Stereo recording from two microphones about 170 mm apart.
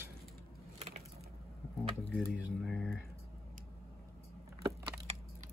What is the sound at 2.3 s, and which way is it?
Speech, 5° right (ahead or behind).